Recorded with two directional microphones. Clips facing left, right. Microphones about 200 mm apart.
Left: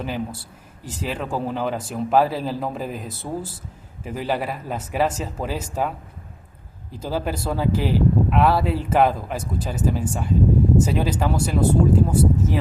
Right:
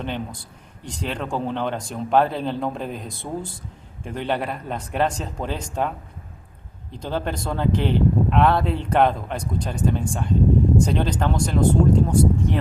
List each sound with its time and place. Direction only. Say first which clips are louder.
0.0 s speech: left 1 dB; 5° left (ahead or behind)
6.9 s speech: left 1 dB; 5° left (ahead or behind)